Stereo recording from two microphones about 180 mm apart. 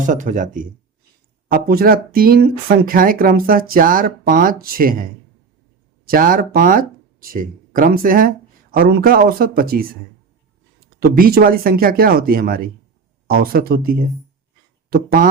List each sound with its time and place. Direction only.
0.0 s speech: 45° right (ahead or behind)
1.5 s speech: 60° right (ahead or behind)
6.1 s speech: 50° right (ahead or behind)
11.0 s speech: 55° right (ahead or behind)